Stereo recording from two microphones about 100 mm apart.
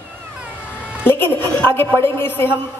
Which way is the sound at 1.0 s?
20° left (ahead or behind).